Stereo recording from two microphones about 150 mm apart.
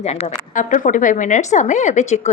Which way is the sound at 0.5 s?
60° left (ahead or behind).